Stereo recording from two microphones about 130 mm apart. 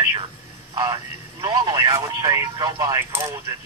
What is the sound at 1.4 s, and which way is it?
Speech, 30° right (ahead or behind).